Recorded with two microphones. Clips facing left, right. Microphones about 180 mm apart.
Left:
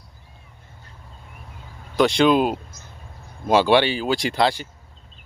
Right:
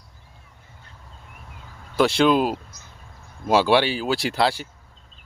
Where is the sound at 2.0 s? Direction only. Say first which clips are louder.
Left 1 dB; 5° right (ahead or behind).